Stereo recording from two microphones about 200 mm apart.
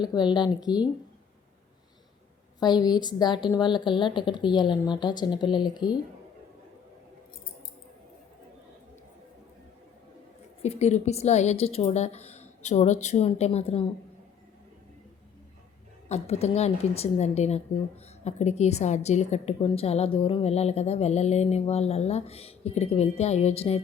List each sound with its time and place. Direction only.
0.0 s a woman's voice: 20° left (ahead or behind)
2.6 s a woman's voice: 20° left (ahead or behind)
10.6 s a woman's voice: 35° left (ahead or behind)
16.0 s a woman's voice: 35° left (ahead or behind)